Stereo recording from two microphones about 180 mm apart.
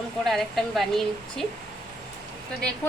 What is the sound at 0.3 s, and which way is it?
A woman's voice, centre (ahead or behind).